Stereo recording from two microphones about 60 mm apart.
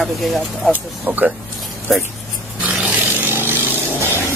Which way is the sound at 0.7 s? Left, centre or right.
Right.